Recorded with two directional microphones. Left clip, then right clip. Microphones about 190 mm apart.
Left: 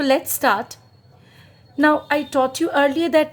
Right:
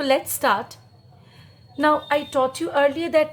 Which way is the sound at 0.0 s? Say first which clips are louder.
Left 2 dB; 30° left (ahead or behind).